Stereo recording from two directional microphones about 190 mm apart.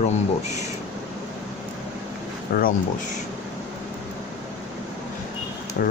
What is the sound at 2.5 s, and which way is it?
Speech, 45° left (ahead or behind).